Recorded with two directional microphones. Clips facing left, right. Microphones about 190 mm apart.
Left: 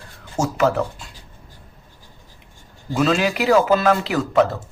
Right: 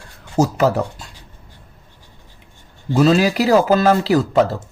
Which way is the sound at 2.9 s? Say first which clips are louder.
Right 5 dB; 35° right (ahead or behind).